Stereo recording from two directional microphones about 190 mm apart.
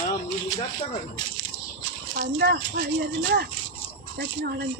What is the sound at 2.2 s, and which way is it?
Speech, 55° right (ahead or behind).